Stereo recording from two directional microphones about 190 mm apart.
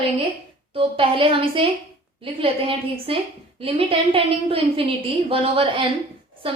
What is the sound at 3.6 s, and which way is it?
A woman's voice, 30° right (ahead or behind).